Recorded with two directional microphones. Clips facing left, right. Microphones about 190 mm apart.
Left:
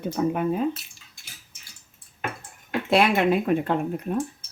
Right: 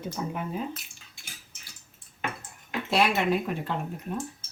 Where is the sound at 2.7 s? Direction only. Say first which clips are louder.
Left 5 dB; 55° left (ahead or behind).